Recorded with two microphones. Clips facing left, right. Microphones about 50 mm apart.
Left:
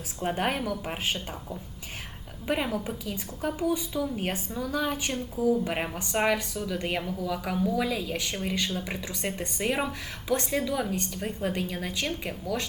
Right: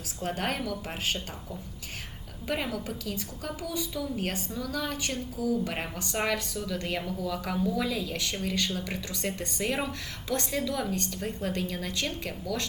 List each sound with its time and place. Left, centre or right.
0.2 s speech: centre
2.6 s speech: left
5.7 s speech: centre